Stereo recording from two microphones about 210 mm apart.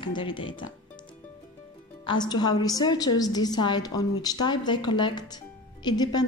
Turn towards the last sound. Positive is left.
turn(degrees=20)  # may be behind; listen again after turning